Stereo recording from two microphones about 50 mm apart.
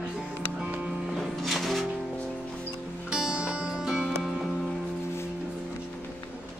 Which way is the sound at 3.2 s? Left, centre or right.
Centre.